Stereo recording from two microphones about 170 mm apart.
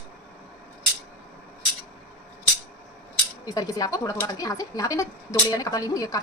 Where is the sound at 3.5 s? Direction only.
20° left (ahead or behind).